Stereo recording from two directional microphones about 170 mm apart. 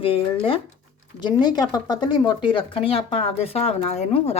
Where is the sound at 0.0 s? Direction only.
30° left (ahead or behind).